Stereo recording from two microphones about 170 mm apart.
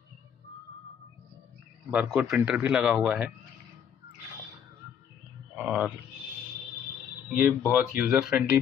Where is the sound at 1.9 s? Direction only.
5° right (ahead or behind).